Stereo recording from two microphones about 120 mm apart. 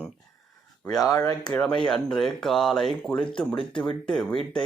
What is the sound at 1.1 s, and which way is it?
Speech, 30° left (ahead or behind).